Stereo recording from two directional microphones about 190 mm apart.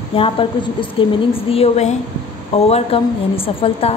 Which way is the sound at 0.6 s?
25° left (ahead or behind).